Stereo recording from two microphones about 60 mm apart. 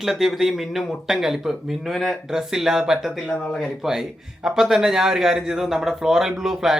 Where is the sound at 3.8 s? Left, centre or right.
Centre.